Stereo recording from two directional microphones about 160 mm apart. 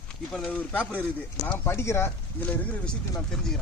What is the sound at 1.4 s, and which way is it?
Speech, 15° left (ahead or behind).